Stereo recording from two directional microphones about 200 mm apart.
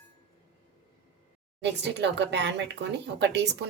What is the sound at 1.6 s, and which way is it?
Speech, 60° right (ahead or behind).